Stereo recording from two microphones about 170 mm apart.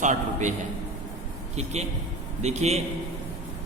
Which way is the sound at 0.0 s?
45° right (ahead or behind).